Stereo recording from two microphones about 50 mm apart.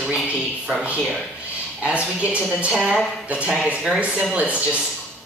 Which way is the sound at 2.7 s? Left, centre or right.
Centre.